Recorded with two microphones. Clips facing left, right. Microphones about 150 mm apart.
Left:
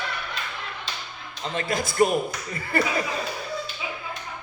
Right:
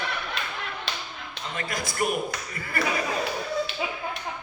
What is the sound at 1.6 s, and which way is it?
A man's voice, 30° left (ahead or behind).